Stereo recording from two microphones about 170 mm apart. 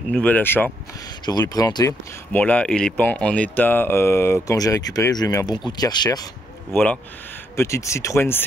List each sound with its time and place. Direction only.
0.1 s speech: 10° left (ahead or behind)
1.2 s speech: 25° left (ahead or behind)
2.3 s speech: 10° left (ahead or behind)
6.7 s speech: 10° left (ahead or behind)